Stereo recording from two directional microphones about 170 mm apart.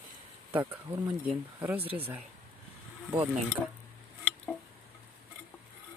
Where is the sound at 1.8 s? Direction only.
35° right (ahead or behind).